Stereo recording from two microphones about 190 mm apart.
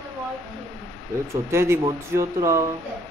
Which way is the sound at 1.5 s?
15° right (ahead or behind).